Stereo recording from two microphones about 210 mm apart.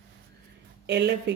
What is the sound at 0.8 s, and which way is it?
Speech, 55° right (ahead or behind).